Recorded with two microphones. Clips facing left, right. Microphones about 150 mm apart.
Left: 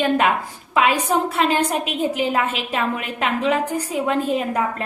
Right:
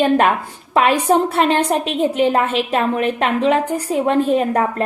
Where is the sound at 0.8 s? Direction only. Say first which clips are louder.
Right 4 dB; 35° right (ahead or behind).